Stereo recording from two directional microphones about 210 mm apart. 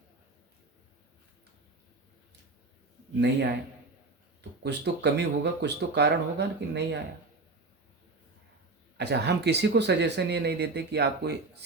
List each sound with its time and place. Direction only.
4.6 s speech: 55° right (ahead or behind)
9.0 s speech: 50° right (ahead or behind)